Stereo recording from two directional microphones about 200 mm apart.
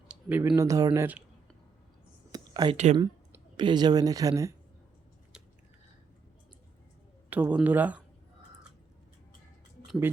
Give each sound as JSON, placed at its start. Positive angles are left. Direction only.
{"t": 0.1, "sound": "a sound", "side_deg": -5}
{"t": 0.4, "sound": "speech", "side_deg": -15}
{"t": 2.3, "sound": "whispering", "side_deg": -20}
{"t": 3.6, "sound": "speech", "side_deg": -20}
{"t": 7.3, "sound": "speech", "side_deg": -10}
{"t": 9.8, "sound": "a sound", "side_deg": 0}